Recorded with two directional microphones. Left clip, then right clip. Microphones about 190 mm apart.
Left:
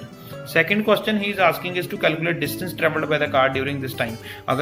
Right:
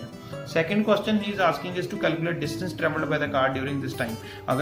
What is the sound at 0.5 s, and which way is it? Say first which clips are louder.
Speech: left 5 dB; 20° left (ahead or behind).